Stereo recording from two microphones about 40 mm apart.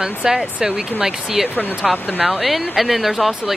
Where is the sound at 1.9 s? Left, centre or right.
Left.